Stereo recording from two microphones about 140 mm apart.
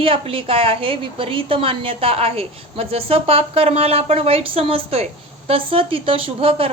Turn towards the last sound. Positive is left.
turn(degrees=-40)  # may be behind; listen again after turning